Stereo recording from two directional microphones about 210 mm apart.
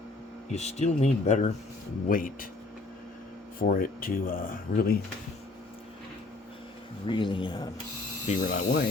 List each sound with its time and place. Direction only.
0.5 s speech: 30° left (ahead or behind)
3.6 s speech: 45° left (ahead or behind)
7.1 s speech: 25° left (ahead or behind)
8.3 s speech: 40° left (ahead or behind)